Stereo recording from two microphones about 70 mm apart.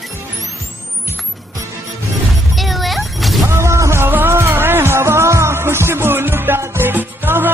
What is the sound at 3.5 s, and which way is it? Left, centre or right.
Music, right.